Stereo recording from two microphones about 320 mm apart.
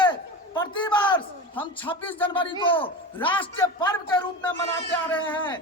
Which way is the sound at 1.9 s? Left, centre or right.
Centre.